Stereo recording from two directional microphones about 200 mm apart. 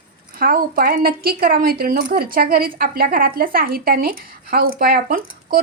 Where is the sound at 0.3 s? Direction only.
45° right (ahead or behind).